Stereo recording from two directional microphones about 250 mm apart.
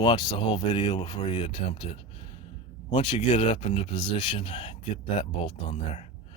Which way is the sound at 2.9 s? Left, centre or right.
Left.